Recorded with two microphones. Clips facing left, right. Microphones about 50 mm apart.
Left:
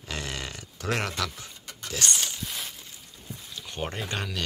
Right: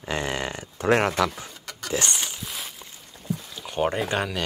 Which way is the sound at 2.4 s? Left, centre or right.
Centre.